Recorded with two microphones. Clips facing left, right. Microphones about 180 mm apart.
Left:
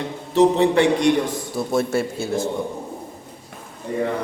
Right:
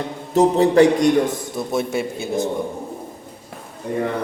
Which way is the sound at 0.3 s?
40° right (ahead or behind).